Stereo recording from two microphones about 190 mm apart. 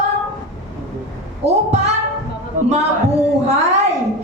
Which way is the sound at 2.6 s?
45° right (ahead or behind).